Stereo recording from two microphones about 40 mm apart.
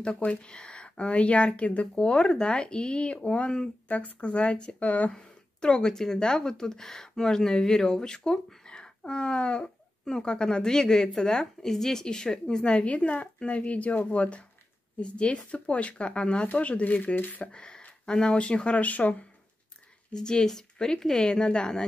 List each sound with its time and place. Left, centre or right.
0.4 s speech: left
5.1 s a woman's voice: left
12.6 s speech: left
17.4 s speech: left
18.9 s speech: left
20.2 s speech: centre